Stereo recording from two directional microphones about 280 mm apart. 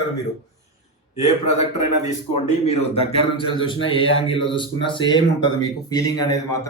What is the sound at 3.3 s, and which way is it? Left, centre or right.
Speech, centre.